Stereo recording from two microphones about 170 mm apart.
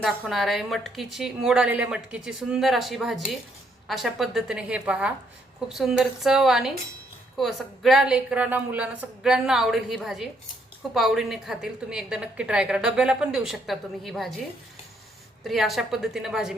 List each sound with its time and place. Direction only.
0.0 s a woman's voice: centre (ahead or behind)
15.4 s a woman's voice: centre (ahead or behind)